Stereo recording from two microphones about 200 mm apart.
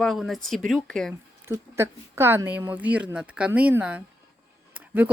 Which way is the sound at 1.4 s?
10° right (ahead or behind).